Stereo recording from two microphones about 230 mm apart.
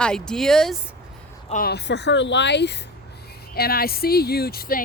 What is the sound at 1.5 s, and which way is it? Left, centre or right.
Speech, left.